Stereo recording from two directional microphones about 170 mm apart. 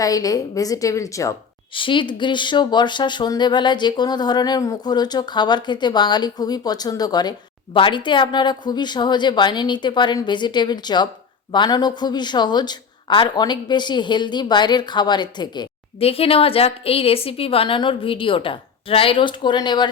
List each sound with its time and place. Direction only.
0.0 s speech: 20° left (ahead or behind)
1.7 s speech: 30° left (ahead or behind)